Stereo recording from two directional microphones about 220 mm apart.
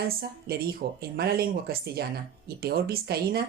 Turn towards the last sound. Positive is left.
turn(degrees=-45)  # may be behind; listen again after turning